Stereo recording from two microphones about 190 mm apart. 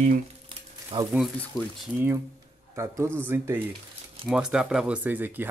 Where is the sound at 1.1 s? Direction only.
Centre (ahead or behind).